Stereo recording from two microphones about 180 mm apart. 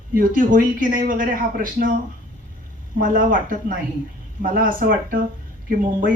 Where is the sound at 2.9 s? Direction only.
50° right (ahead or behind).